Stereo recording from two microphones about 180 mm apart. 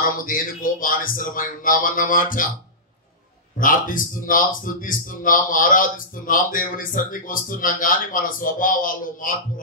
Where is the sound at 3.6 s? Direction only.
50° left (ahead or behind).